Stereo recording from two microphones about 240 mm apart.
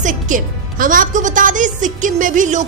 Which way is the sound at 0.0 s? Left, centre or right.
Right.